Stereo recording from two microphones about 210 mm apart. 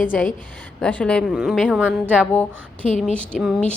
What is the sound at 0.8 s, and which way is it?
A woman's voice, 5° left (ahead or behind).